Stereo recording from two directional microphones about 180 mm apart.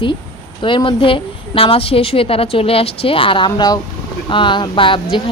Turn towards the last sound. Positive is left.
turn(degrees=30)  # may be behind; listen again after turning